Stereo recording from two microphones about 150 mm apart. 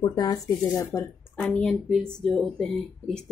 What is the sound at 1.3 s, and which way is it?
Speech, 10° left (ahead or behind).